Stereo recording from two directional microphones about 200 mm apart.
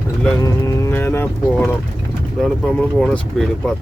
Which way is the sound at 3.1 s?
5° left (ahead or behind).